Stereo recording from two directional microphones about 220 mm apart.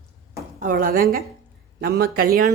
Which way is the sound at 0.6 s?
40° right (ahead or behind).